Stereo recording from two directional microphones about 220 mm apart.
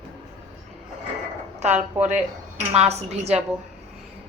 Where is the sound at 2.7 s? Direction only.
30° right (ahead or behind).